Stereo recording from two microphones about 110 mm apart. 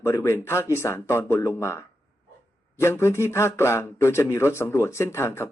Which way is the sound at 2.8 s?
25° left (ahead or behind).